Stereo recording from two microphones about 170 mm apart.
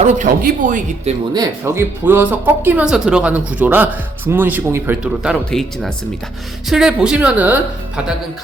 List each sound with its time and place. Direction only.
0.0 s speech: 50° right (ahead or behind)
1.3 s speech: 20° right (ahead or behind)